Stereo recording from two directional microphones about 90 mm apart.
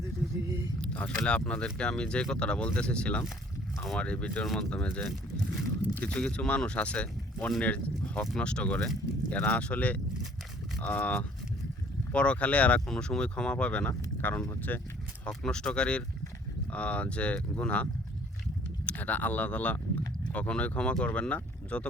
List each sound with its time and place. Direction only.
0.8 s speech: 10° left (ahead or behind)
15.2 s speech: 10° left (ahead or behind)
18.9 s speech: 15° left (ahead or behind)